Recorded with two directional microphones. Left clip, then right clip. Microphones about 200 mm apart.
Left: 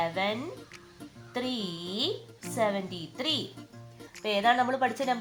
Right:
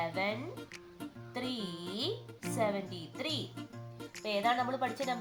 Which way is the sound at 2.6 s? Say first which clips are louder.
Left 5 dB; 15° left (ahead or behind).